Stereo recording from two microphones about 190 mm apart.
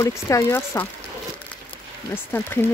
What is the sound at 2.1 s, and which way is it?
Speech, 10° left (ahead or behind).